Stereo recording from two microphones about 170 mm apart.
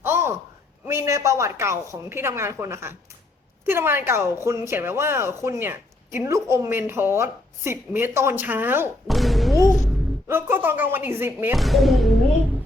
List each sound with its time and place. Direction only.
0.0 s a sound: 15° right (ahead or behind)
0.9 s a woman's voice: 15° right (ahead or behind)
9.0 s thump: centre (ahead or behind)
10.2 s a woman's voice: 15° right (ahead or behind)
11.5 s speech: centre (ahead or behind)